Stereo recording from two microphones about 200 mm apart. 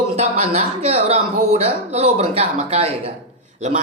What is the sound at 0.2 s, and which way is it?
Speech, 30° right (ahead or behind).